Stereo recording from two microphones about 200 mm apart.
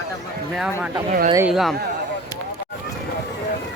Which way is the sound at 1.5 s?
Centre (ahead or behind).